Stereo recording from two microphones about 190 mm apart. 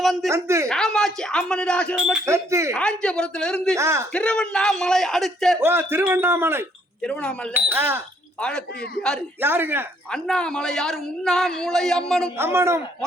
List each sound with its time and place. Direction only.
0.0 s speech: centre (ahead or behind)
0.3 s speech: 15° right (ahead or behind)
0.7 s a man's voice: 5° left (ahead or behind)
2.2 s speech: 15° right (ahead or behind)
2.7 s a man's voice: 5° left (ahead or behind)
3.8 s speech: 15° right (ahead or behind)
4.1 s a man's voice: 5° left (ahead or behind)
5.5 s speech: 10° right (ahead or behind)
7.0 s speech: 5° left (ahead or behind)
7.5 s speech: 10° right (ahead or behind)
8.4 s a man's voice: 5° left (ahead or behind)
9.4 s speech: 10° right (ahead or behind)
10.1 s a man's voice: 5° left (ahead or behind)
12.4 s speech: 15° right (ahead or behind)